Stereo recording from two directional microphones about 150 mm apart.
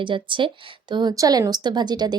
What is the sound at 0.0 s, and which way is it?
Speech, 35° right (ahead or behind).